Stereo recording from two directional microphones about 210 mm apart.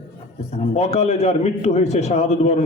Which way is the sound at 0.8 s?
30° left (ahead or behind).